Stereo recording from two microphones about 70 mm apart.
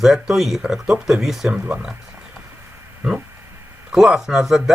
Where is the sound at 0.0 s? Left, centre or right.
Centre.